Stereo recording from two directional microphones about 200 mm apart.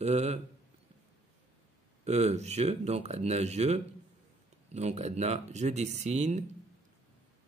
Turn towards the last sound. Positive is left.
turn(degrees=-35)  # may be behind; listen again after turning